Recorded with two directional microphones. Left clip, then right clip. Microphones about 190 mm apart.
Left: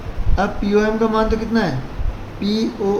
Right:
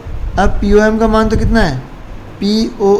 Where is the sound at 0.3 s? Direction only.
60° right (ahead or behind).